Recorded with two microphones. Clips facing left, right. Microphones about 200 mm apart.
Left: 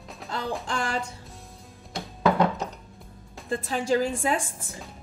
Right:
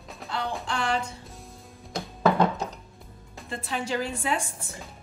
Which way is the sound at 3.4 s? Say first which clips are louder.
Left 5 dB; 45° left (ahead or behind).